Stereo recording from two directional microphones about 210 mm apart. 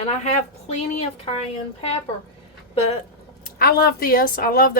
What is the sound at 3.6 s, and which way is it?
Speech, 45° left (ahead or behind).